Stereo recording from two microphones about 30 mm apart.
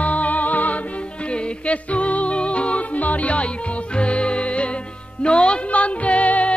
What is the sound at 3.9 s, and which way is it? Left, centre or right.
Music, left.